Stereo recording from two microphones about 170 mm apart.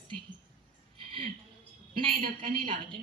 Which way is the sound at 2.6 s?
30° right (ahead or behind).